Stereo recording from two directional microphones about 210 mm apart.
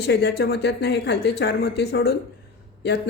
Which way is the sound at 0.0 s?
50° left (ahead or behind).